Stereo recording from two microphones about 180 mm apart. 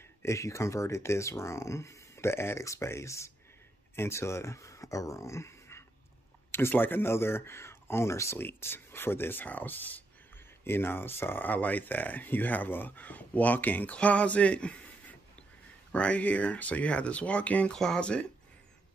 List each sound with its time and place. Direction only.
0.2 s speech: 15° left (ahead or behind)